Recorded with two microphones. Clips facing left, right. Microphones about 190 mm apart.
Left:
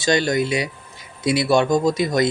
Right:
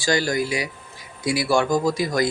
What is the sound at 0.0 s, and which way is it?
A man's voice, 20° left (ahead or behind).